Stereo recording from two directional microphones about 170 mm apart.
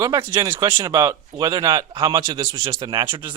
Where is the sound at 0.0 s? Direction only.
15° right (ahead or behind).